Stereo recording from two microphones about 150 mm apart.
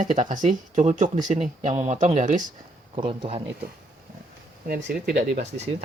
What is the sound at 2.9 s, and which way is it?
Speech, 35° right (ahead or behind).